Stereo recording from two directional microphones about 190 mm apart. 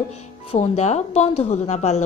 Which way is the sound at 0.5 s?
35° left (ahead or behind).